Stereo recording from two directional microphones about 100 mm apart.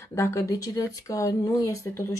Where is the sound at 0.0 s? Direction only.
30° left (ahead or behind).